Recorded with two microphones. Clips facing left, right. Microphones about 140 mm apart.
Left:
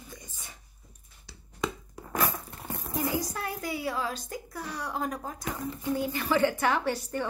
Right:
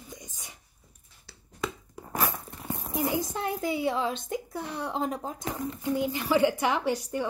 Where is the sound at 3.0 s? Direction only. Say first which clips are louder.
Right 3 dB; 25° right (ahead or behind).